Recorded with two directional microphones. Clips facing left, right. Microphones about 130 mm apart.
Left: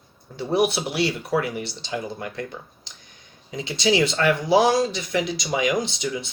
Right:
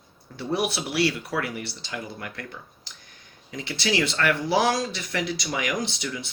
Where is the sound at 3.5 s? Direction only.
15° left (ahead or behind).